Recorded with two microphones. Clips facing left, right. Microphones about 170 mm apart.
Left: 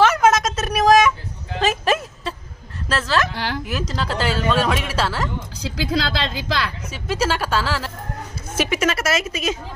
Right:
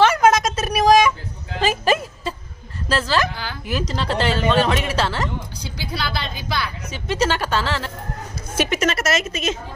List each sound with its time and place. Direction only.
0.0 s a sound: centre (ahead or behind)
2.9 s speech: centre (ahead or behind)
3.3 s a woman's voice: 80° left
3.6 s speech: centre (ahead or behind)
5.6 s a woman's voice: 90° left
6.9 s a woman's voice: 5° left (ahead or behind)